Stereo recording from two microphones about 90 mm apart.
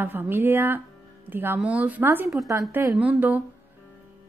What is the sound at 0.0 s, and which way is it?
A woman's voice, 25° right (ahead or behind).